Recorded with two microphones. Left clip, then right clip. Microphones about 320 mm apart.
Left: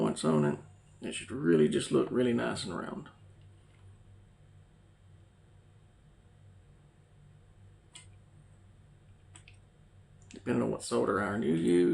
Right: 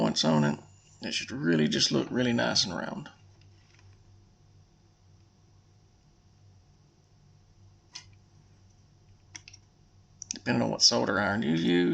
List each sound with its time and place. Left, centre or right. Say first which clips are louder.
0.2 s speech: right 3 dB; right
10.3 s speech: right 3 dB; right